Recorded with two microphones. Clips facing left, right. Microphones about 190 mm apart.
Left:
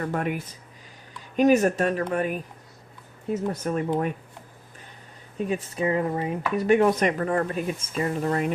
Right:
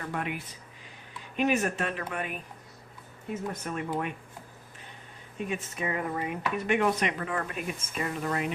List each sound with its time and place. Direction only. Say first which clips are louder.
0.0 s speech: left 7 dB; 45° left (ahead or behind)
3.5 s speech: left 6 dB; 40° left (ahead or behind)
5.4 s speech: left 7 dB; 35° left (ahead or behind)